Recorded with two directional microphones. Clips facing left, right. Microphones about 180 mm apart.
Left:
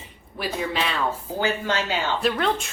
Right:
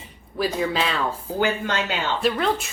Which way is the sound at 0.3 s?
40° right (ahead or behind).